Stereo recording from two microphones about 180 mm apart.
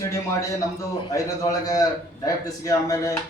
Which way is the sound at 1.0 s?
20° left (ahead or behind).